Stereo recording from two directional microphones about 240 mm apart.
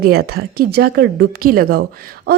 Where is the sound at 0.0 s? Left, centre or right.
Right.